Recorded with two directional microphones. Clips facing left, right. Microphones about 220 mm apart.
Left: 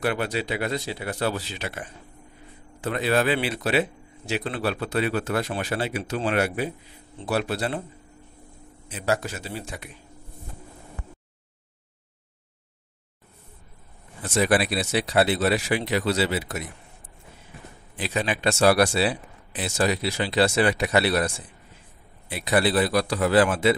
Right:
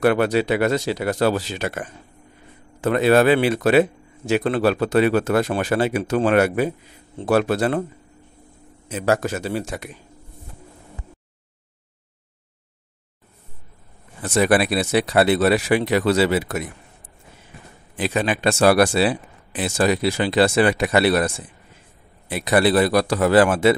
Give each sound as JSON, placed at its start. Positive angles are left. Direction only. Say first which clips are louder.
{"t": 0.0, "sound": "speech", "louder": "right 9 dB", "side_deg": -60}
{"t": 1.6, "sound": "speech", "louder": "right 7 dB", "side_deg": -45}
{"t": 2.8, "sound": "speech", "louder": "right 8 dB", "side_deg": -65}
{"t": 3.3, "sound": "a man's voice", "louder": "right 8 dB", "side_deg": -50}
{"t": 4.7, "sound": "speech", "louder": "right 8 dB", "side_deg": -85}
{"t": 5.4, "sound": "speech", "louder": "right 7 dB", "side_deg": -50}
{"t": 8.8, "sound": "speech", "louder": "right 6 dB", "side_deg": -50}
{"t": 14.2, "sound": "speech", "louder": "right 4 dB", "side_deg": -65}
{"t": 18.4, "sound": "speech", "louder": "right 3 dB", "side_deg": -50}
{"t": 22.5, "sound": "speech", "louder": "right 5 dB", "side_deg": -70}